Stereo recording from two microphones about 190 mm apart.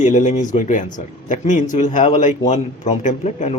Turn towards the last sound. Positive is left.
turn(degrees=35)  # may be behind; listen again after turning